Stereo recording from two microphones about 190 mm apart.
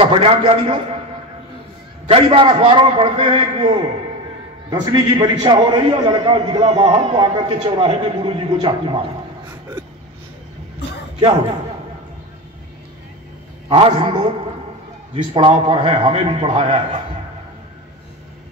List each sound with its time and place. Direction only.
0.0 s a man's voice: 30° right (ahead or behind)
2.0 s a man's voice: 30° right (ahead or behind)
13.7 s a man's voice: 30° right (ahead or behind)